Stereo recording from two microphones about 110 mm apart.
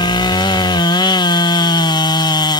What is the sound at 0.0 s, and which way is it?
Chainsaw, 40° left (ahead or behind).